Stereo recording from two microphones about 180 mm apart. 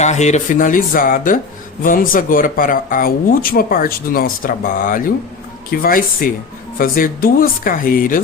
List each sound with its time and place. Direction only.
0.0 s speech: 40° left (ahead or behind)